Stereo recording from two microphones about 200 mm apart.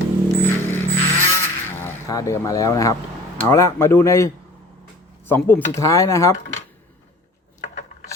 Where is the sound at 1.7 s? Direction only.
15° left (ahead or behind).